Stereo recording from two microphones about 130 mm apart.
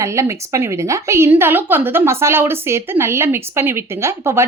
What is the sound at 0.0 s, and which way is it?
A woman's voice, 25° right (ahead or behind).